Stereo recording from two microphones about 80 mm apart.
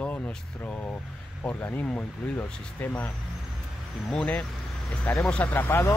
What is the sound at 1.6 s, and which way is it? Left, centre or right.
Speech, left.